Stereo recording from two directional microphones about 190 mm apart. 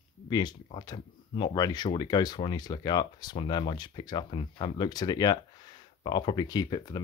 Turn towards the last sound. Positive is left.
turn(degrees=20)  # may be behind; listen again after turning